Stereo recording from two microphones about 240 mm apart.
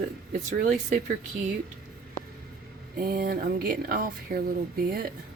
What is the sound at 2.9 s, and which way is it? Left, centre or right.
Speech, right.